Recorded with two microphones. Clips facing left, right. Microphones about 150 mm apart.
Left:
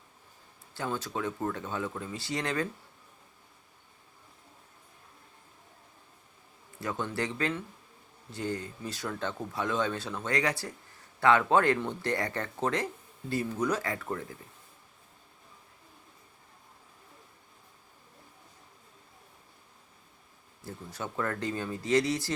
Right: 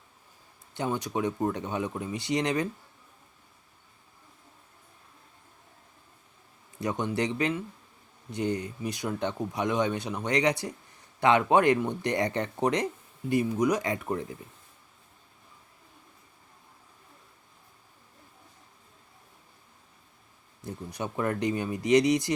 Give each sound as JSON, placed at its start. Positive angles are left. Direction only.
{"t": 0.7, "sound": "speech", "side_deg": -20}
{"t": 6.7, "sound": "speech", "side_deg": -20}
{"t": 20.7, "sound": "speech", "side_deg": -20}